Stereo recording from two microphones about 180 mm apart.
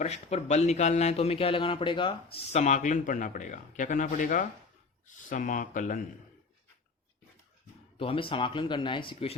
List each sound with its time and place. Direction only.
0.0 s a man's voice: 40° left (ahead or behind)
7.9 s speech: 30° left (ahead or behind)